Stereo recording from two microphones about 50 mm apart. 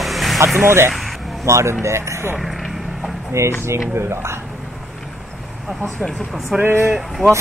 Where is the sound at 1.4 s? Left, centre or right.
Right.